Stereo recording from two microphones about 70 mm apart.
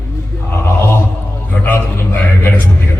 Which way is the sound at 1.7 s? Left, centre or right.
Left.